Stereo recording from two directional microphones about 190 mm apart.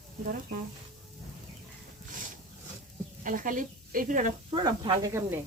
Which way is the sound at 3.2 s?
45° right (ahead or behind).